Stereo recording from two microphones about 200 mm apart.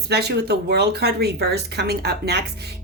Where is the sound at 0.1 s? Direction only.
55° right (ahead or behind).